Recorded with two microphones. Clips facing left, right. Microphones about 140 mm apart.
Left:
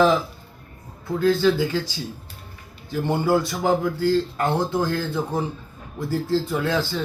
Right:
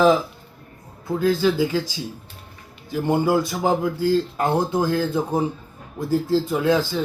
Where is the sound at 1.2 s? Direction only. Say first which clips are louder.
Even; 10° right (ahead or behind).